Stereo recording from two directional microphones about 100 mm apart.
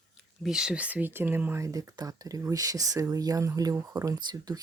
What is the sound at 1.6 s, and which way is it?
Speech, 35° right (ahead or behind).